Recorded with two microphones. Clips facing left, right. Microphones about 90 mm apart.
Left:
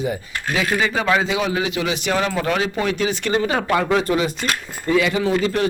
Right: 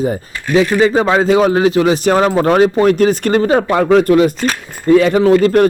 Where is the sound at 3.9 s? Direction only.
55° right (ahead or behind).